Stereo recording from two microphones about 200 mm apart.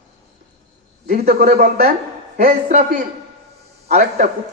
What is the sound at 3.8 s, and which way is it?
Speech, 35° right (ahead or behind).